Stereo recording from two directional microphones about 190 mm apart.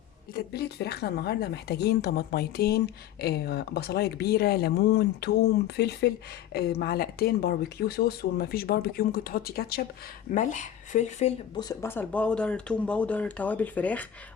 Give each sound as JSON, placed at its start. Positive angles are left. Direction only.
{"t": 0.3, "sound": "speech", "side_deg": 60}
{"t": 10.3, "sound": "speech", "side_deg": 40}
{"t": 11.5, "sound": "speech", "side_deg": 20}